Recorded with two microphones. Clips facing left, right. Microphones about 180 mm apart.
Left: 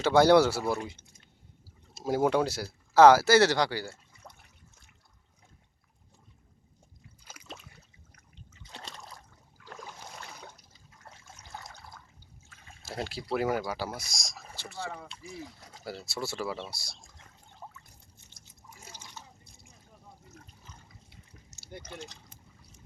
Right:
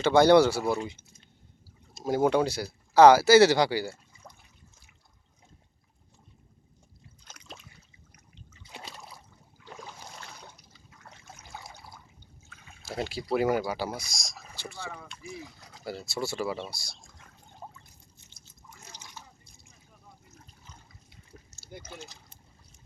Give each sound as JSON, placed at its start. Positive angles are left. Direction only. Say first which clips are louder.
{"t": 0.0, "sound": "speech", "louder": "right 2 dB", "side_deg": 5}
{"t": 2.0, "sound": "speech", "louder": "right 2 dB", "side_deg": 5}
{"t": 7.3, "sound": "a sound", "louder": "left 2 dB", "side_deg": 5}
{"t": 8.7, "sound": "a sound", "louder": "right 1 dB", "side_deg": -5}
{"t": 9.8, "sound": "boat", "louder": "left 2 dB", "side_deg": 5}
{"t": 11.4, "sound": "trickle", "louder": "even", "side_deg": -10}
{"t": 12.9, "sound": "speech", "louder": "right 3 dB", "side_deg": 0}
{"t": 14.8, "sound": "speech", "louder": "even", "side_deg": 30}
{"t": 15.8, "sound": "speech", "louder": "right 3 dB", "side_deg": 5}
{"t": 18.4, "sound": "liquid", "louder": "even", "side_deg": 10}
{"t": 21.7, "sound": "speech", "louder": "left 1 dB", "side_deg": -5}